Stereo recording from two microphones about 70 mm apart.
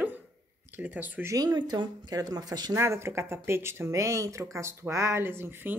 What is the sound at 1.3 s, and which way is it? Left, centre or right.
Speech, right.